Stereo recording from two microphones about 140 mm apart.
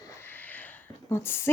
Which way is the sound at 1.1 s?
15° left (ahead or behind).